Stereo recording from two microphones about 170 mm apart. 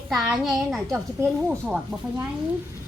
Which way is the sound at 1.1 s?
15° right (ahead or behind).